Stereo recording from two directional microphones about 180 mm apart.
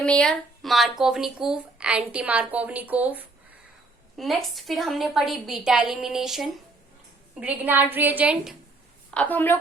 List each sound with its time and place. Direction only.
0.0 s speech: 5° left (ahead or behind)
4.2 s a woman's voice: centre (ahead or behind)
9.0 s a woman's voice: 5° left (ahead or behind)